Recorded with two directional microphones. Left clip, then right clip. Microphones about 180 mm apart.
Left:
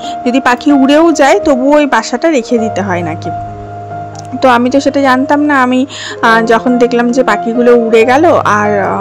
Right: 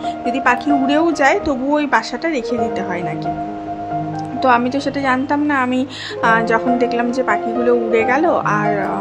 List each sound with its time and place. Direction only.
0.2 s a woman's voice: 50° left (ahead or behind)
4.4 s a woman's voice: 40° left (ahead or behind)